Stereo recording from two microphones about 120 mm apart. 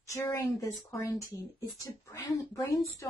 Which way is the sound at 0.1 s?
25° left (ahead or behind).